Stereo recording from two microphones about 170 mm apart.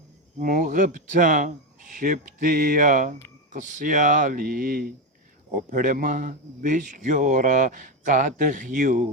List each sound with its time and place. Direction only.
0.3 s speech: 50° right (ahead or behind)